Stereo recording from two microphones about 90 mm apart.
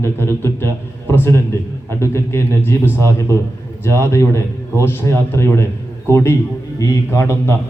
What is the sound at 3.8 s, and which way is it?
A man's voice, 30° left (ahead or behind).